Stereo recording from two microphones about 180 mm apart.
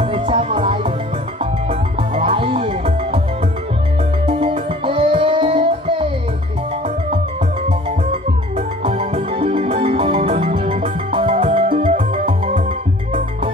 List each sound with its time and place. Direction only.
0.0 s music: 30° right (ahead or behind)
4.3 s music: 30° right (ahead or behind)
8.1 s music: 30° right (ahead or behind)